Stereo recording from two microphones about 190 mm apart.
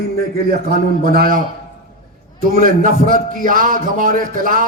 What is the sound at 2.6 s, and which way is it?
A man's voice, 45° right (ahead or behind).